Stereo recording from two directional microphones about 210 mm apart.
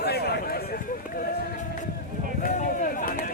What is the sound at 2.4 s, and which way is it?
Run, 40° left (ahead or behind).